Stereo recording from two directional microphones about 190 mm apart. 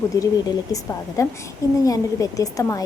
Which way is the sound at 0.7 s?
15° left (ahead or behind).